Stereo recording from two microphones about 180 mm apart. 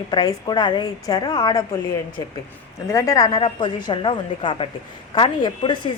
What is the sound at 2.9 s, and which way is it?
A woman's voice, 20° left (ahead or behind).